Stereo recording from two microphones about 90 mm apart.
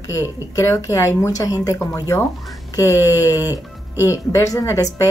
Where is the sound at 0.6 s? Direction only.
35° left (ahead or behind).